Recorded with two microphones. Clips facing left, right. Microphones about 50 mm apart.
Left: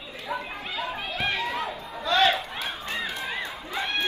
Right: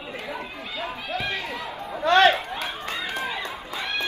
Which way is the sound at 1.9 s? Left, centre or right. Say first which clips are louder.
Right 5 dB; right.